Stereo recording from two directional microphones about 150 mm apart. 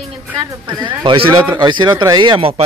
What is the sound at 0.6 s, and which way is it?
Speech, 30° right (ahead or behind).